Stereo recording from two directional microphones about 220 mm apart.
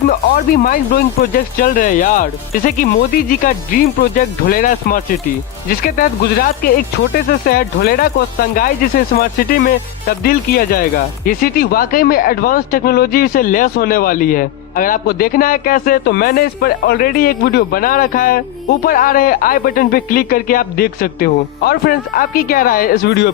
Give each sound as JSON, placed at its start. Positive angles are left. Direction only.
{"t": 0.1, "sound": "speech", "side_deg": 40}
{"t": 9.1, "sound": "speech", "side_deg": 45}